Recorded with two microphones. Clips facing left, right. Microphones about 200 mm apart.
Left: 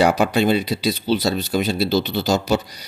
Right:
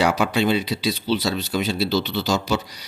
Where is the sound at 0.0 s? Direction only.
45° left (ahead or behind).